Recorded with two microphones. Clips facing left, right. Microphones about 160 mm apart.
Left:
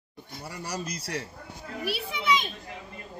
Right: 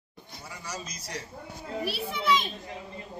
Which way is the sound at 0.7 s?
65° left (ahead or behind).